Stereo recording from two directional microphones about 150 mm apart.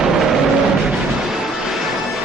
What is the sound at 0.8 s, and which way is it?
Music, 5° right (ahead or behind).